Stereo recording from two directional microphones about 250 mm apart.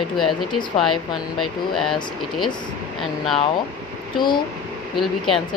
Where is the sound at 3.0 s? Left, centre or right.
Centre.